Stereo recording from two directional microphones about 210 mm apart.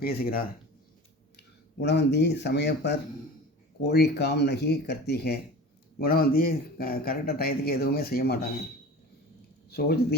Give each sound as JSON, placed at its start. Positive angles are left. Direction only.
{"t": 0.0, "sound": "speech", "side_deg": 45}
{"t": 9.6, "sound": "speech", "side_deg": 50}